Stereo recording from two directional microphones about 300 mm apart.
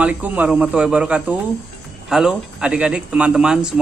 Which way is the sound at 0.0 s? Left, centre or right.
Centre.